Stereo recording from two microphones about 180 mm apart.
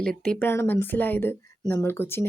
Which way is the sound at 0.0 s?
5° left (ahead or behind).